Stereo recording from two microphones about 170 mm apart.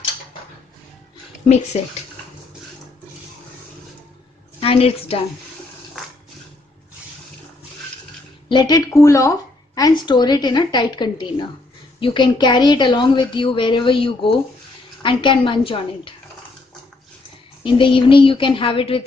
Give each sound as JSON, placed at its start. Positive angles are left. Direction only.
{"t": 4.6, "sound": "a woman's voice", "side_deg": 35}
{"t": 8.5, "sound": "a woman's voice", "side_deg": 25}
{"t": 17.6, "sound": "a woman's voice", "side_deg": 30}